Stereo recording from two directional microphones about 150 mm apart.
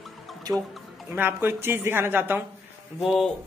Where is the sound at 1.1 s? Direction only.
15° right (ahead or behind).